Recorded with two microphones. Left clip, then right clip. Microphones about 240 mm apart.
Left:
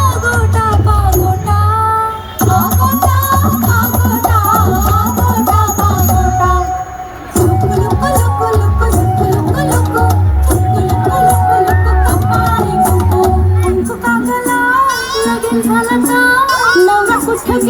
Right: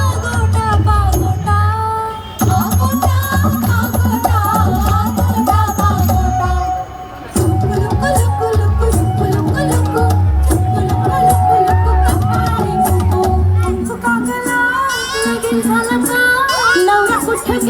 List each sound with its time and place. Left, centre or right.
0.0 s music: centre